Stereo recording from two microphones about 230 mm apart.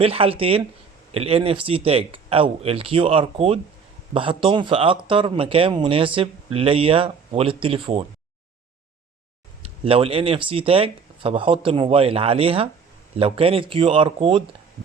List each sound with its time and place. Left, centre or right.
0.0 s speech: right
9.8 s speech: right